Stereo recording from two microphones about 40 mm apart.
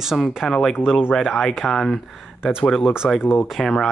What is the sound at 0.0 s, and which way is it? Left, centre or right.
Speech, centre.